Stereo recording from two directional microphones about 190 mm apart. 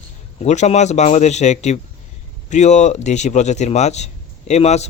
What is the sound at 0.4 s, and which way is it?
A man's voice, 35° left (ahead or behind).